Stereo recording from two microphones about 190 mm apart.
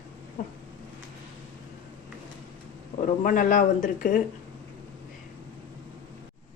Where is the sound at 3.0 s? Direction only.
45° left (ahead or behind).